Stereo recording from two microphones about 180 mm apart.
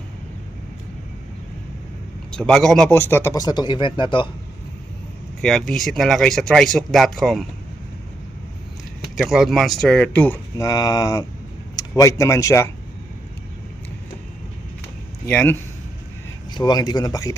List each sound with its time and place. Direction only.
2.3 s speech: 5° left (ahead or behind); by 4.3 s 25° left (ahead or behind)
5.4 s speech: centre (ahead or behind)
9.1 s speech: centre (ahead or behind); by 12.7 s 15° left (ahead or behind)
15.3 s speech: 5° left (ahead or behind)
16.6 s speech: 25° left (ahead or behind)